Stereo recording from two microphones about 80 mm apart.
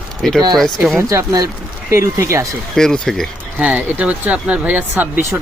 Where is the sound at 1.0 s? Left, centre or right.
Right.